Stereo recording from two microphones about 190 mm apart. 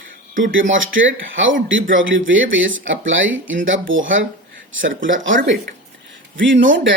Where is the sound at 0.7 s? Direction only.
90° right.